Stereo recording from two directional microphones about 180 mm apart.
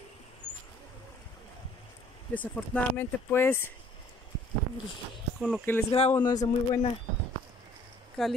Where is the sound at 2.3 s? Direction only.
10° left (ahead or behind).